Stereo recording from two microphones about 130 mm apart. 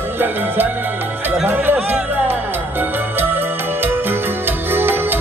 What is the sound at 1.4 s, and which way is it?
Music, 15° right (ahead or behind).